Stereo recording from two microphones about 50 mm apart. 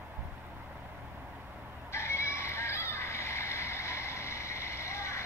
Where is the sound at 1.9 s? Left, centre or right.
Left.